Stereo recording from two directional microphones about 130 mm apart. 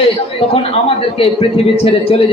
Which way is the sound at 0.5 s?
45° left (ahead or behind).